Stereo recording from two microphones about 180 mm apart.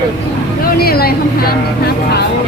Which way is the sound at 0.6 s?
55° left (ahead or behind).